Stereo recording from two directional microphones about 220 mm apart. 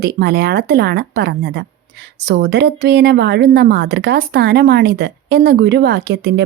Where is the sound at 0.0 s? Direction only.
45° right (ahead or behind).